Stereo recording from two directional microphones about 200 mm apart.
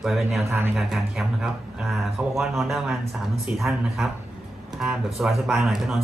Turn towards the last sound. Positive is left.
turn(degrees=0)  # may be behind; listen again after turning